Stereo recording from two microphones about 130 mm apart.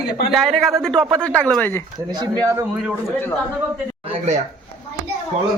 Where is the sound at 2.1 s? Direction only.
35° right (ahead or behind).